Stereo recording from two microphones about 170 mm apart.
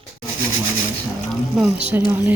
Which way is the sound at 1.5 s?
5° right (ahead or behind).